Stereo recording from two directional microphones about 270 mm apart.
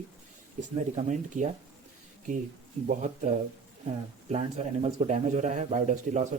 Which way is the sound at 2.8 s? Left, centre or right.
Right.